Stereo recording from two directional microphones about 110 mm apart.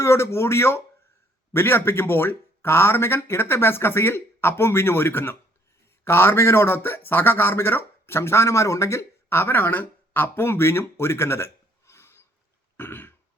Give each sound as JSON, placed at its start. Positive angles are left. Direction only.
{"t": 0.0, "sound": "a man's voice", "side_deg": 25}
{"t": 12.7, "sound": "throat clearing", "side_deg": 20}